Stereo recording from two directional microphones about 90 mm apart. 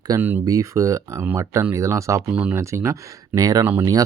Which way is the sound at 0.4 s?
40° right (ahead or behind).